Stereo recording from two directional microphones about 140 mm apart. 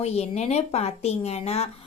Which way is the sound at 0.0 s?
50° left (ahead or behind).